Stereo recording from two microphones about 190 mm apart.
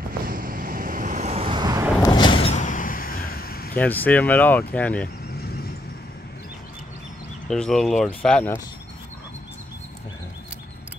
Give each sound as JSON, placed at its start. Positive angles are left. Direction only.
{"t": 0.3, "sound": "vehicle", "side_deg": -50}
{"t": 2.0, "sound": "a sound", "side_deg": 25}
{"t": 2.5, "sound": "vehicle", "side_deg": 40}
{"t": 3.7, "sound": "speech", "side_deg": 10}
{"t": 7.4, "sound": "speech", "side_deg": 5}